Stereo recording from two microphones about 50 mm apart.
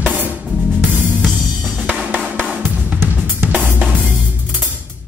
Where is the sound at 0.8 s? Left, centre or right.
Right.